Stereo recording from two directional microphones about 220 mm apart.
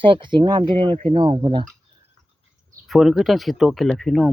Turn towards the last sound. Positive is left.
turn(degrees=0)  # may be behind; listen again after turning